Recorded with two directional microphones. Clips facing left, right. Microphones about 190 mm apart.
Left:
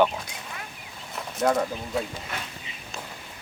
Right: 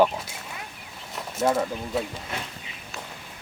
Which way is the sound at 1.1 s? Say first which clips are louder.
Even; 5° right (ahead or behind).